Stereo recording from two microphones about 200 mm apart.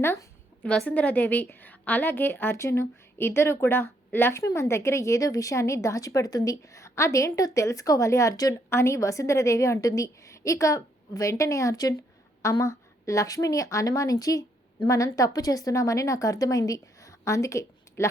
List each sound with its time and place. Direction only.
0.0 s a woman's voice: 10° left (ahead or behind)